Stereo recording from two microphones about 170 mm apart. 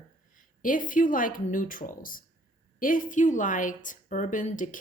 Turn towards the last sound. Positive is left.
turn(degrees=50)  # may be behind; listen again after turning